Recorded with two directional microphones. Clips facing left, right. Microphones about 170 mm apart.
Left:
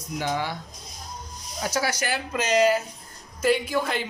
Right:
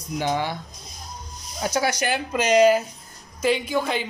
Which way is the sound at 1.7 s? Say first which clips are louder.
Right 3 dB; 20° right (ahead or behind).